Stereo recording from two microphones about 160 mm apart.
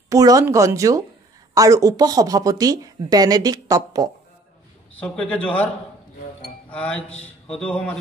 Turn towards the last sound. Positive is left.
turn(degrees=5)  # may be behind; listen again after turning